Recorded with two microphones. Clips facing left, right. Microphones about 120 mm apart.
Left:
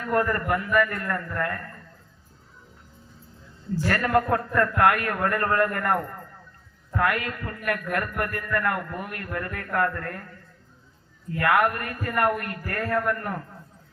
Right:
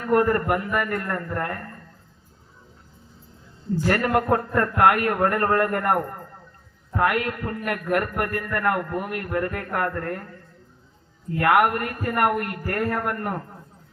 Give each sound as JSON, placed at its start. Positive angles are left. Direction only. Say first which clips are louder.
{"t": 0.0, "sound": "a man's voice", "louder": "right 4 dB", "side_deg": -25}
{"t": 4.1, "sound": "a man's voice", "louder": "right 1 dB", "side_deg": -30}
{"t": 11.3, "sound": "a man's voice", "louder": "right 3 dB", "side_deg": -25}